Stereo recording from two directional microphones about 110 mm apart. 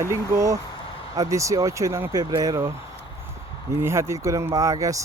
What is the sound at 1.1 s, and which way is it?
Speech, 30° right (ahead or behind).